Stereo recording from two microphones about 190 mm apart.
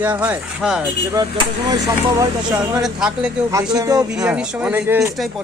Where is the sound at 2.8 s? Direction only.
5° right (ahead or behind).